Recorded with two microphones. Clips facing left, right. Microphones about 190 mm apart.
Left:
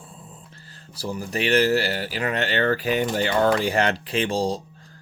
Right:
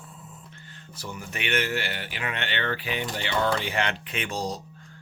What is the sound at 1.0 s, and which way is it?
Speech, 35° left (ahead or behind).